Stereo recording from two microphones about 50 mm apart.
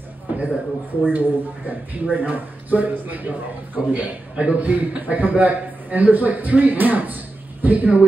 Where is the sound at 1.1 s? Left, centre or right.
Right.